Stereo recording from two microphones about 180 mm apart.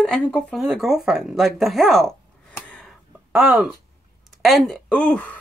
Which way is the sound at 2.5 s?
5° left (ahead or behind).